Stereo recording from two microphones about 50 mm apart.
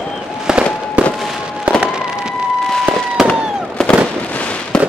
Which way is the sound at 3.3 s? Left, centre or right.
Centre.